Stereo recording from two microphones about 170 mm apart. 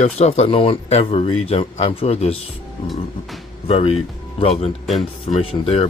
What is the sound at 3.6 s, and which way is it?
Speech, 35° left (ahead or behind).